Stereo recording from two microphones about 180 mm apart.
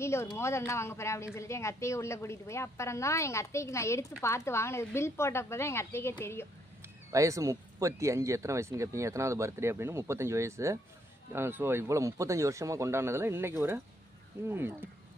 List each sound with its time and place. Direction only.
0.0 s a woman's voice: 15° left (ahead or behind)
7.1 s speech: 15° right (ahead or behind)